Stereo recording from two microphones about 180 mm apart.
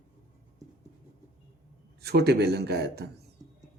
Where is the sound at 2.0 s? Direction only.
65° right (ahead or behind).